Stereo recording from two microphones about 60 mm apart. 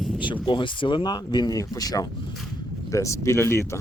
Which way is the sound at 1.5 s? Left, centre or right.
Left.